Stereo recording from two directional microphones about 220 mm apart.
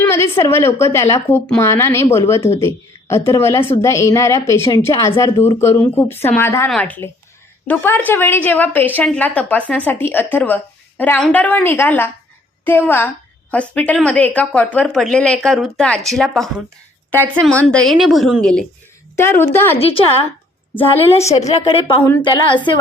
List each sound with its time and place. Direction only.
0.0 s a woman's voice: 10° left (ahead or behind)
19.7 s a woman's voice: 25° left (ahead or behind)
21.4 s a woman's voice: 25° left (ahead or behind)